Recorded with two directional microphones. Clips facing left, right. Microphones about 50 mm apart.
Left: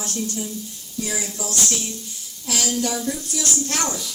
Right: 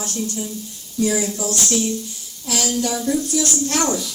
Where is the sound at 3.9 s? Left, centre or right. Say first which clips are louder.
Right 6 dB; centre.